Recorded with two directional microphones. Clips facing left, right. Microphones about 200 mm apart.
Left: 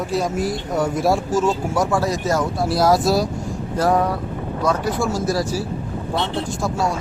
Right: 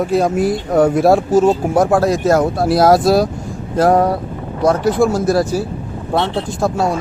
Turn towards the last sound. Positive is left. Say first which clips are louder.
# right 5 dB
turn(degrees=-60)  # may be behind; listen again after turning